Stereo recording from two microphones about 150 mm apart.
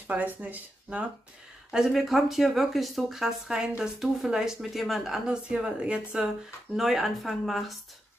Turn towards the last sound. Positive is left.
turn(degrees=0)  # may be behind; listen again after turning